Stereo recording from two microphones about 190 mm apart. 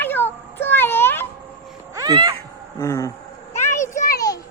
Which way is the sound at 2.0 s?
25° right (ahead or behind).